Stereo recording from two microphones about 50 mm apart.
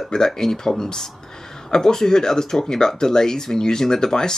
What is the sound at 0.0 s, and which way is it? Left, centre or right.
Speech, centre.